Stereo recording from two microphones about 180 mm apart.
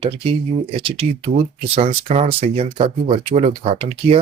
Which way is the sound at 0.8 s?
30° right (ahead or behind).